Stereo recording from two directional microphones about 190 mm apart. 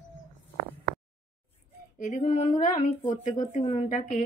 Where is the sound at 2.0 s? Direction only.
35° left (ahead or behind).